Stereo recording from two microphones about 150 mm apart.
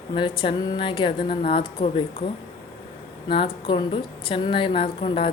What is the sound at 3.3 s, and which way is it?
Speech, 35° left (ahead or behind).